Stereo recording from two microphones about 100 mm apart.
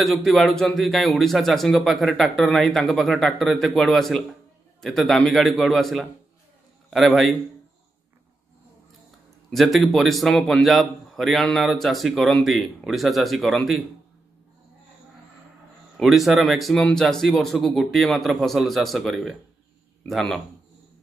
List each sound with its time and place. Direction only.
0.0 s a man's voice: centre (ahead or behind)
9.5 s a man's voice: centre (ahead or behind)
16.0 s a man's voice: centre (ahead or behind)